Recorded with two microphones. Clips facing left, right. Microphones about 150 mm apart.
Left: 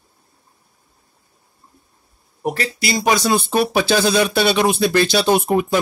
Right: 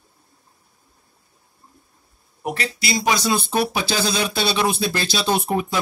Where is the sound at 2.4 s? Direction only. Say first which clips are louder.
Left 4 dB; 40° left (ahead or behind).